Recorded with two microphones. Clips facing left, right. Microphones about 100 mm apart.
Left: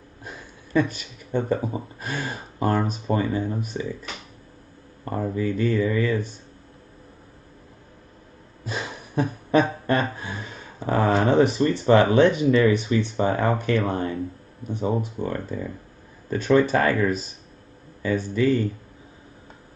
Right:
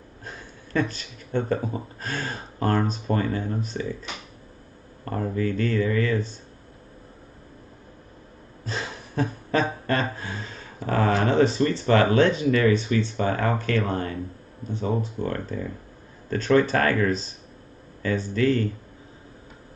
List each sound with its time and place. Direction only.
0.2 s speech: 10° left (ahead or behind)
5.0 s speech: 15° left (ahead or behind)
8.6 s a sound: 15° left (ahead or behind)
13.1 s speech: 20° left (ahead or behind)